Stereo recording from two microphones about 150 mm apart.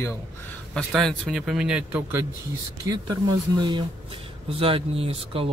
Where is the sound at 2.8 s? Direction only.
25° right (ahead or behind).